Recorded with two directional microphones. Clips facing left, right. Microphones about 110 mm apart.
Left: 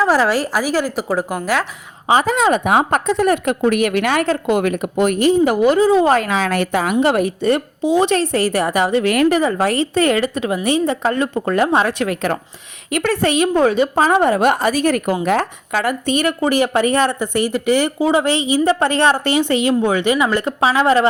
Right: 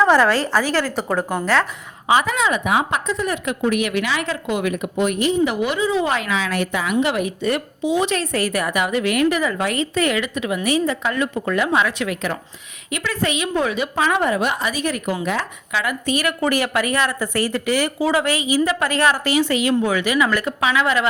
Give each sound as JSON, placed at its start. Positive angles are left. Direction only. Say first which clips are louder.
{"t": 0.0, "sound": "a woman's voice", "louder": "even", "side_deg": 5}
{"t": 2.0, "sound": "a woman's voice", "louder": "left 4 dB", "side_deg": 40}
{"t": 9.1, "sound": "speech", "louder": "left 3 dB", "side_deg": 45}
{"t": 9.4, "sound": "a woman's voice", "louder": "left 5 dB", "side_deg": 35}
{"t": 13.2, "sound": "speech", "louder": "left 6 dB", "side_deg": 40}
{"t": 15.9, "sound": "a woman's voice", "louder": "left 4 dB", "side_deg": 30}
{"t": 17.2, "sound": "a woman's voice", "louder": "left 3 dB", "side_deg": 20}